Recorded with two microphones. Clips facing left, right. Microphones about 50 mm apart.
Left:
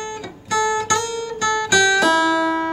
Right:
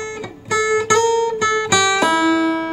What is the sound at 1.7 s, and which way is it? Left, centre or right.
Music, centre.